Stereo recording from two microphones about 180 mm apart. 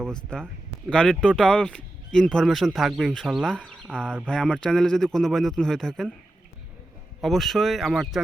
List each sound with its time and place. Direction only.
0.3 s speech: 5° left (ahead or behind)
7.2 s speech: centre (ahead or behind)